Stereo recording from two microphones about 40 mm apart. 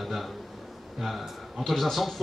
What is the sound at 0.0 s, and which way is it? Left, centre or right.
A man's voice, centre.